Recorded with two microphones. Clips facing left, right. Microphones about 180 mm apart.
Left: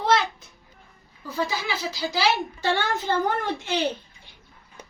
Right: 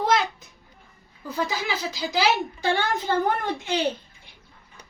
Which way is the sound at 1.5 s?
20° right (ahead or behind).